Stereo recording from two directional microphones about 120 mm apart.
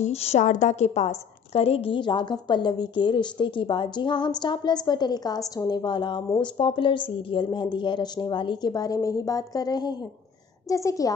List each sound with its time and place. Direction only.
0.0 s a woman's voice: 60° left (ahead or behind); by 11.1 s 30° left (ahead or behind)